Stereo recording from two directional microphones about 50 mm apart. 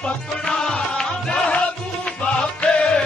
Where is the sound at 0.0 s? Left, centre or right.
Left.